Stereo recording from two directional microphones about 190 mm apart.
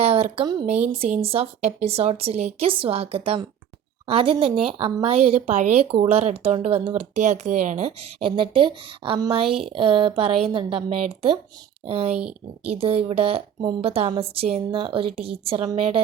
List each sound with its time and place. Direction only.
0.0 s a woman's voice: 30° right (ahead or behind)
8.4 s a woman's voice: 25° right (ahead or behind)